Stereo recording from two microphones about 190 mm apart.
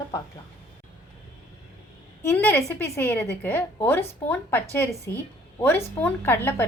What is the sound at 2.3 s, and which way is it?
A woman's voice, 10° left (ahead or behind).